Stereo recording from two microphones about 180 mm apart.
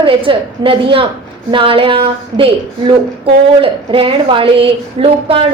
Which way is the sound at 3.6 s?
30° right (ahead or behind).